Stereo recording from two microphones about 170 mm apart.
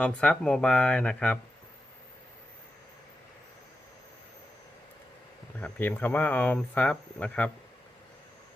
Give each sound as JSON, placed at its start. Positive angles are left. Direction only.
{"t": 0.0, "sound": "speech", "side_deg": 5}
{"t": 5.5, "sound": "speech", "side_deg": 10}